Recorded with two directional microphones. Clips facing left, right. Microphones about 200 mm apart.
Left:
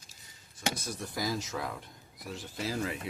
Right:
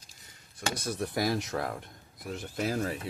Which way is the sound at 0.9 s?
65° right (ahead or behind).